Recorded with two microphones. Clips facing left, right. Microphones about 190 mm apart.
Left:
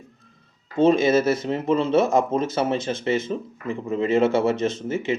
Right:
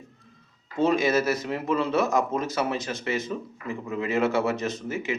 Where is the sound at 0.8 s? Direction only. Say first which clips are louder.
Left 5 dB; 25° left (ahead or behind).